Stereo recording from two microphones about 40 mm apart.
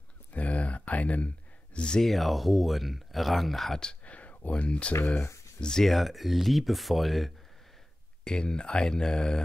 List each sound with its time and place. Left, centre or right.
0.3 s a sound: left
2.0 s speech: centre
4.0 s a sound: left
5.6 s speech: centre
5.9 s speech: centre
8.2 s speech: left